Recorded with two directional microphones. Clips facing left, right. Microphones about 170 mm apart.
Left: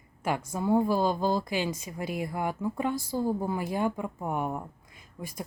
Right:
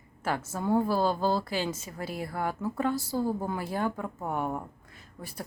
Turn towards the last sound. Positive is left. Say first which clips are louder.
# even
turn(degrees=5)  # may be behind; listen again after turning